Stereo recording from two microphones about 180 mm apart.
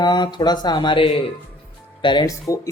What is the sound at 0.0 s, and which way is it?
Speech, 25° left (ahead or behind).